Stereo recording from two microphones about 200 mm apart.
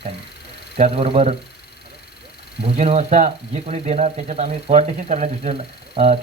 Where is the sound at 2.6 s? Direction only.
30° right (ahead or behind).